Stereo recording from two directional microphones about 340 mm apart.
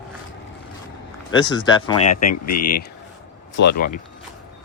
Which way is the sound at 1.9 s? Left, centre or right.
Left.